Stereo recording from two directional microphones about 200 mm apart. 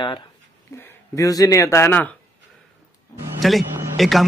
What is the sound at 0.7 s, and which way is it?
Speech, 15° left (ahead or behind).